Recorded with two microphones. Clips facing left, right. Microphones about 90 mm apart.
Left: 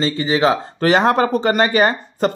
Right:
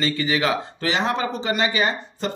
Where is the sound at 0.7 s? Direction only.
50° left (ahead or behind).